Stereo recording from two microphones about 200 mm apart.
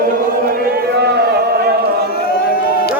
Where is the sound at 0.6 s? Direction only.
55° right (ahead or behind).